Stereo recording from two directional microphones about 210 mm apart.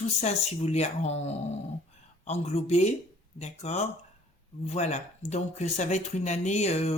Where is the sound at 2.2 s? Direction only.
30° left (ahead or behind).